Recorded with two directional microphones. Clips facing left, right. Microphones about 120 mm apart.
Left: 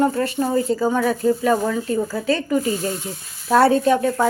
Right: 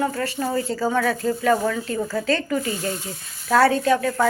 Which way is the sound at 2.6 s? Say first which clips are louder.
Left 4 dB; 25° left (ahead or behind).